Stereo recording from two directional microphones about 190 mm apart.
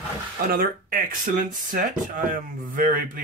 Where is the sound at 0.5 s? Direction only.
50° right (ahead or behind).